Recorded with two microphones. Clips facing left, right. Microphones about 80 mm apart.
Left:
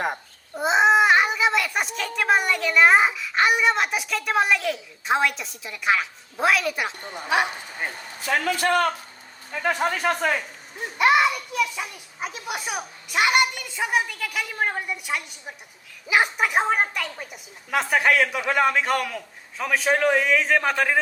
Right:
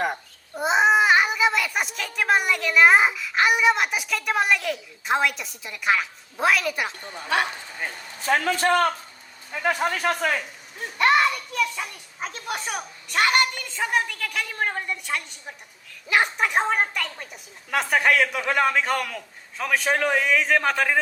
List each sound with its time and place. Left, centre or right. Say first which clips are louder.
0.5 s a child's voice: left 1 dB; centre
7.0 s speech: left 2 dB; left
7.3 s a child's voice: left 1 dB; centre
8.2 s a man's voice: right 1 dB; right
9.5 s a child's voice: even; centre